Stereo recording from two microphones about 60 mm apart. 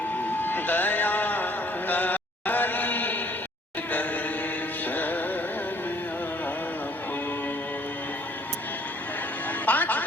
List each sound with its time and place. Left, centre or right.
0.4 s music: left
1.9 s mantra: left
4.9 s music: left
9.6 s music: left